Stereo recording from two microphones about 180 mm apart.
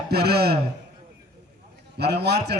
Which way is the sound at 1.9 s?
65° right (ahead or behind).